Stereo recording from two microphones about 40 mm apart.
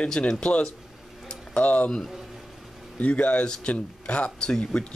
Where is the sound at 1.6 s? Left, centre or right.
Left.